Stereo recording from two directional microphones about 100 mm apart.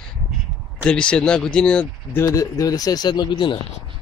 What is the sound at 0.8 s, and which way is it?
Speech, 10° left (ahead or behind).